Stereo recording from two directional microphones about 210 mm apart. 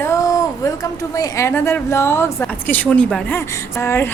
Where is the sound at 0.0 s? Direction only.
15° left (ahead or behind).